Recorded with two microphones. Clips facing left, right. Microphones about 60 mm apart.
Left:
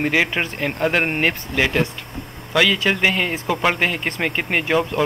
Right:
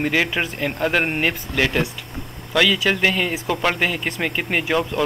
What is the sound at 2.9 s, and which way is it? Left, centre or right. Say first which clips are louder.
Speech: even; centre.